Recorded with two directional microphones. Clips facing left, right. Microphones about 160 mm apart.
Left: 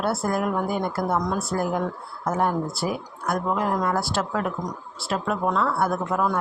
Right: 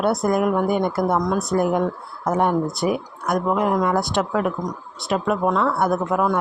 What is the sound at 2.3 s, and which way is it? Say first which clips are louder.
Speech: right 4 dB; 20° right (ahead or behind).